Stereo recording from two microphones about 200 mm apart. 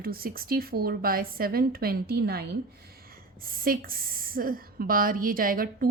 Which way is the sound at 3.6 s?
45° right (ahead or behind).